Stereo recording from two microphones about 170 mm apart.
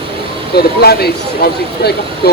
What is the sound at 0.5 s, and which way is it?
Speech, 70° left (ahead or behind).